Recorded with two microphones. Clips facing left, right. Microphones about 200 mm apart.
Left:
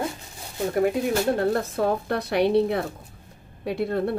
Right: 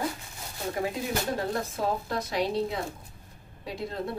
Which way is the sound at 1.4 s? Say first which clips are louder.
Left 7 dB; 60° left (ahead or behind).